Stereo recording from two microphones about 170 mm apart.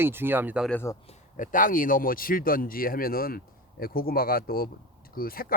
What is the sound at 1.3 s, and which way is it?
Speech, 50° left (ahead or behind).